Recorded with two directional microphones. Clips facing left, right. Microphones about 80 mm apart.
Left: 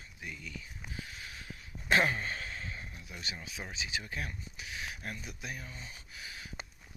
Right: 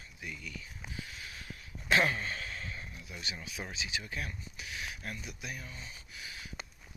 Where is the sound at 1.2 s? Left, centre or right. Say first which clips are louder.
Even; left.